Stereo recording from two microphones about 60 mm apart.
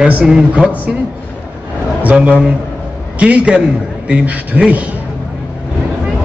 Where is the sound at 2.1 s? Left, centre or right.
Centre.